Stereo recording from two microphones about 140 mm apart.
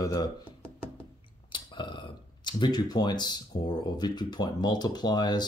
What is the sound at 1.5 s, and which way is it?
Speech, 35° left (ahead or behind).